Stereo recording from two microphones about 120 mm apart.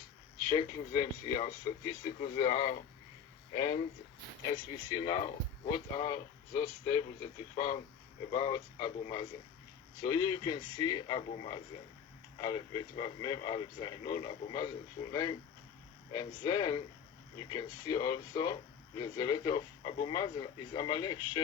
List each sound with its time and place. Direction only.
0.5 s speech: 45° left (ahead or behind)